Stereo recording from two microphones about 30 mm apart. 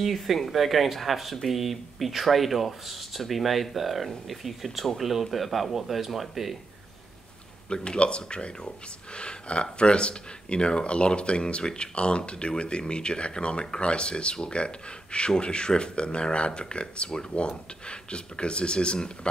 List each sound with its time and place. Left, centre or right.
0.0 s speech: centre
7.7 s speech: left